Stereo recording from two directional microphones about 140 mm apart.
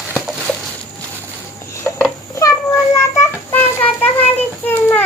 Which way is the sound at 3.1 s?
15° left (ahead or behind).